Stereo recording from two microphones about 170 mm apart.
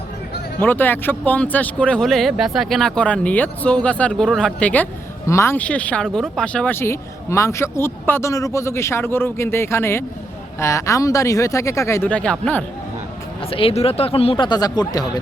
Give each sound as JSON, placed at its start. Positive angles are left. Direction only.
{"t": 0.6, "sound": "a man's voice", "side_deg": 10}
{"t": 13.5, "sound": "speech", "side_deg": 35}